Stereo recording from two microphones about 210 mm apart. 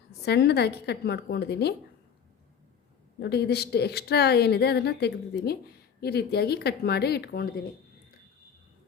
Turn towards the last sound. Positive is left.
turn(degrees=50)  # may be behind; listen again after turning